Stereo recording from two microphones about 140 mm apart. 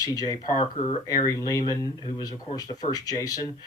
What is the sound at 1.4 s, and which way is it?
Speech, 25° left (ahead or behind).